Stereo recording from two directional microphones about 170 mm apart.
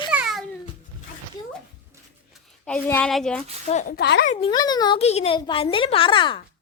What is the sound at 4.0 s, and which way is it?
Speech, 75° left (ahead or behind).